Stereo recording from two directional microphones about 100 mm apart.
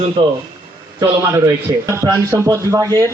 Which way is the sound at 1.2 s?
30° right (ahead or behind).